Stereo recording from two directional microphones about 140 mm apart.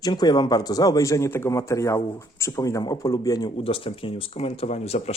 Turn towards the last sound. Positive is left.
turn(degrees=50)  # may be behind; listen again after turning